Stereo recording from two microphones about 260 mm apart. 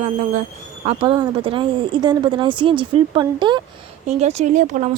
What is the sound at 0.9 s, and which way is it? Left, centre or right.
Speech, centre.